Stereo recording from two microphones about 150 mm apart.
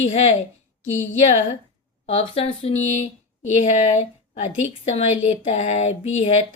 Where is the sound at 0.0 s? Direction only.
45° left (ahead or behind).